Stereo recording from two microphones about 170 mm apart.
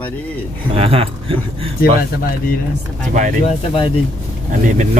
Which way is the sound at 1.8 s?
60° left (ahead or behind).